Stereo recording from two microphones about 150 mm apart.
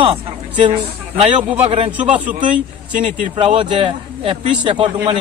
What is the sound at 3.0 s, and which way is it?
A man's voice, 35° right (ahead or behind).